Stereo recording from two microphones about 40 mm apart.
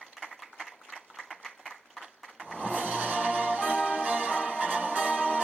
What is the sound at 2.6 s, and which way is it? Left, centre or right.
Music, right.